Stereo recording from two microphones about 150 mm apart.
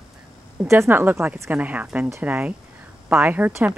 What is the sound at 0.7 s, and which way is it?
A woman's voice, 15° right (ahead or behind).